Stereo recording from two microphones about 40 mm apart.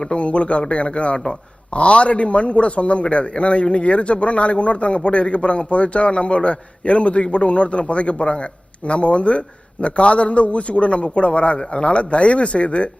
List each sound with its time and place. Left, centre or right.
0.0 s a man's voice: left